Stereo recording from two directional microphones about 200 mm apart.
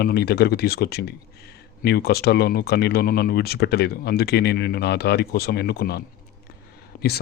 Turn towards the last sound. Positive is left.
turn(degrees=55)  # may be behind; listen again after turning